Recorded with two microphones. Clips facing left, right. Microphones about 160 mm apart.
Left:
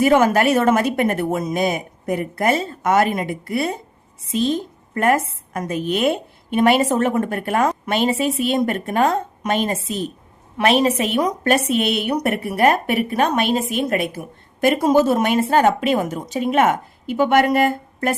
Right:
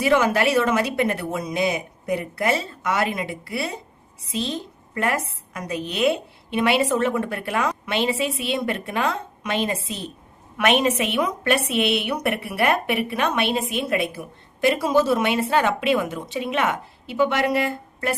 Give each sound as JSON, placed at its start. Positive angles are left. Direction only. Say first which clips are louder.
{"t": 0.0, "sound": "a woman's voice", "louder": "left 4 dB", "side_deg": 50}
{"t": 10.6, "sound": "a woman's voice", "louder": "left 3 dB", "side_deg": 35}